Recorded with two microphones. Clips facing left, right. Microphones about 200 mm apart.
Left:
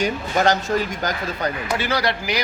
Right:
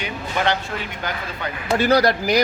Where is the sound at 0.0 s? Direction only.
40° left (ahead or behind).